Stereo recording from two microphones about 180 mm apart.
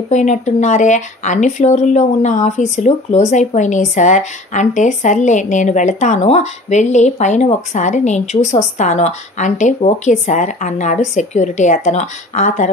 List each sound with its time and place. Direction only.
0.1 s speech: 40° left (ahead or behind)